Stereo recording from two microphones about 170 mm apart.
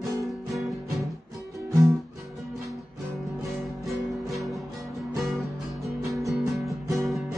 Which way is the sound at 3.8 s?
Centre (ahead or behind).